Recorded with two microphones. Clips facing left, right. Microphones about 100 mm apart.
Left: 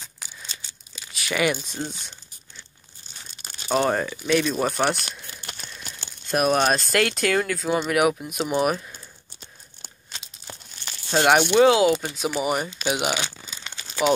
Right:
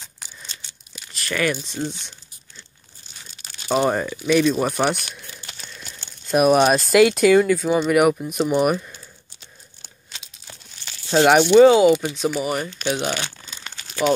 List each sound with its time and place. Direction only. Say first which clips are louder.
0.0 s tearing: even; centre (ahead or behind)
3.6 s speech: right 2 dB; 5° right (ahead or behind)
6.2 s speech: right 5 dB; 5° right (ahead or behind)
9.8 s a sound: left 2 dB; 40° left (ahead or behind)
11.1 s speech: right 5 dB; centre (ahead or behind)
12.4 s speech: even; 15° left (ahead or behind)
12.7 s crumpling: right 1 dB; 15° left (ahead or behind)